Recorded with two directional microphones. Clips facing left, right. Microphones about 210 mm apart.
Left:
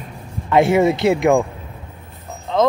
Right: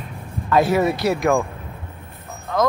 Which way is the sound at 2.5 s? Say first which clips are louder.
Left 4 dB; 20° left (ahead or behind).